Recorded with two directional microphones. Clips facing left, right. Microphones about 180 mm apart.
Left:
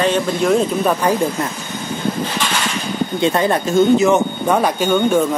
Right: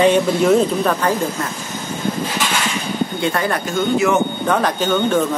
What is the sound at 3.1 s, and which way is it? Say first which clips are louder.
Speech: left 7 dB; 20° left (ahead or behind).